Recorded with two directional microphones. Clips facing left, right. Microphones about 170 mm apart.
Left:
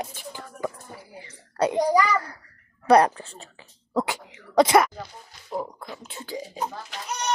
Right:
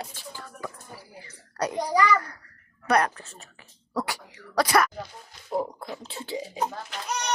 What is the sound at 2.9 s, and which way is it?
Speech, 30° left (ahead or behind).